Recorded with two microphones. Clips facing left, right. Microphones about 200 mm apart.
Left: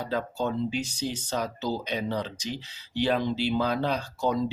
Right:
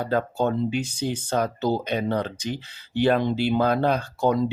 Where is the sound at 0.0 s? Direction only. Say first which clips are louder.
Right 6 dB; 55° right (ahead or behind).